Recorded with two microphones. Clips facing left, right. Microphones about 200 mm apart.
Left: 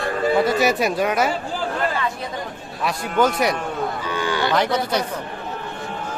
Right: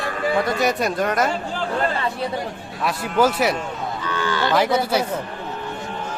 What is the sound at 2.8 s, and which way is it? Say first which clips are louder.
Speech: right 1 dB; 5° right (ahead or behind).